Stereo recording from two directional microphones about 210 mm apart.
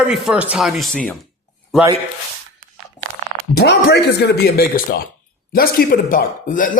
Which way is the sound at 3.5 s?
50° left (ahead or behind).